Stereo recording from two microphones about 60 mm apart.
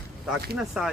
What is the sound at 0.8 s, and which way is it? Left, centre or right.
Speech, centre.